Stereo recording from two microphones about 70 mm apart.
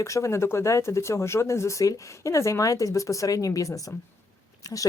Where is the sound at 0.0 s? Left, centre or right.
Left.